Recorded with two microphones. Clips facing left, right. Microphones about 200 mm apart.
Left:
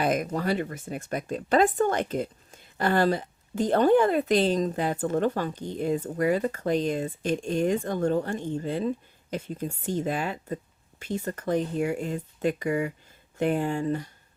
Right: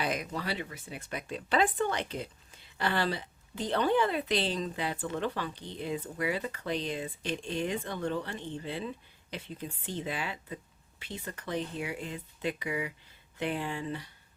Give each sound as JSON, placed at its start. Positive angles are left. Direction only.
{"t": 0.0, "sound": "speech", "side_deg": 50}